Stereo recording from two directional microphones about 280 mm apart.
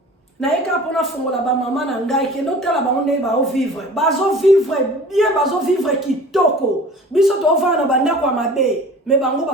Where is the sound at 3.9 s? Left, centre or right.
Centre.